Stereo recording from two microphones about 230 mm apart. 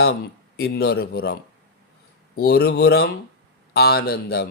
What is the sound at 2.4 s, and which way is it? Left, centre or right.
Speech, left.